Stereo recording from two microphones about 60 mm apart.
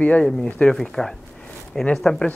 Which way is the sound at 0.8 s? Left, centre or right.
Centre.